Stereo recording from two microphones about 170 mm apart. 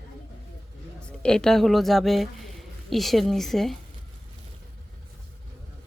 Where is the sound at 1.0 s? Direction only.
5° left (ahead or behind).